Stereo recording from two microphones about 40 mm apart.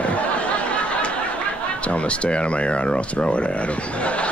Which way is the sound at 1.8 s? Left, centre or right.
Left.